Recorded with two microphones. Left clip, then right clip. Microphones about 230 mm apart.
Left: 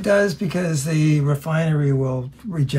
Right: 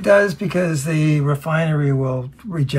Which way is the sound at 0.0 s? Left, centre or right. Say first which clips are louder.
Right 4 dB; centre.